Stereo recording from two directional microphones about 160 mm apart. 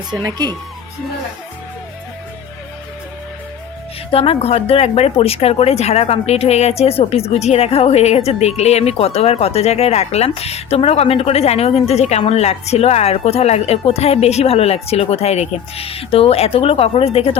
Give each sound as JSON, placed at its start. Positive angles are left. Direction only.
{"t": 0.1, "sound": "speech", "side_deg": -25}
{"t": 4.1, "sound": "speech", "side_deg": 40}